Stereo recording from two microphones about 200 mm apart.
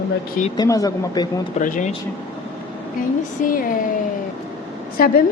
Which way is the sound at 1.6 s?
40° left (ahead or behind).